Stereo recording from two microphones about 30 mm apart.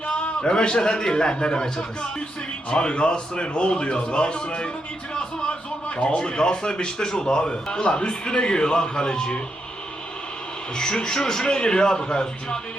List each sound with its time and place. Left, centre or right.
0.1 s a man's voice: left
10.8 s a man's voice: left